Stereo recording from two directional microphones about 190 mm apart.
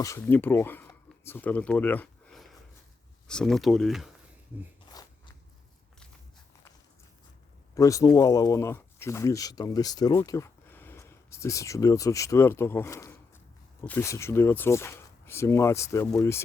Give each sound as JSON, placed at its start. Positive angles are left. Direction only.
{"t": 0.0, "sound": "speech", "side_deg": 15}
{"t": 4.9, "sound": "a sound", "side_deg": 20}
{"t": 7.8, "sound": "speech", "side_deg": 15}